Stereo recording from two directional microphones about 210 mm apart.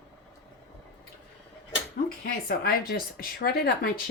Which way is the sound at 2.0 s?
45° left (ahead or behind).